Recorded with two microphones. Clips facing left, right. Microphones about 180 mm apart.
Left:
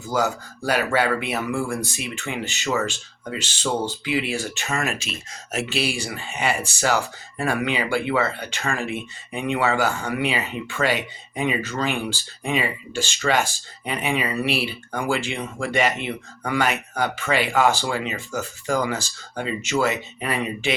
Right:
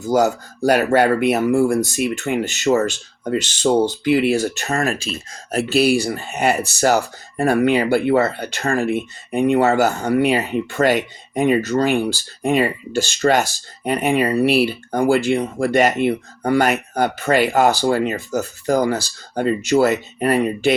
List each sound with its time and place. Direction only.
0.1 s speech: 45° right (ahead or behind)
2.0 s speech: 55° right (ahead or behind)
2.7 s speech: 35° right (ahead or behind)
4.0 s speech: 50° right (ahead or behind)
8.8 s speech: 55° right (ahead or behind)
9.4 s speech: 40° right (ahead or behind)